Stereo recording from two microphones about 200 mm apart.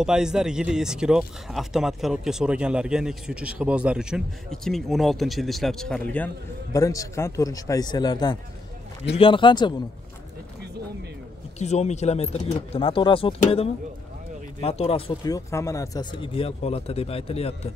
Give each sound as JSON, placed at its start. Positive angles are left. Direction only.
{"t": 0.0, "sound": "a man's voice", "side_deg": -5}
{"t": 11.5, "sound": "speech", "side_deg": 35}